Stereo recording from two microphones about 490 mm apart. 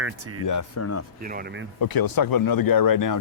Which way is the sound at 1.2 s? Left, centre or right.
Centre.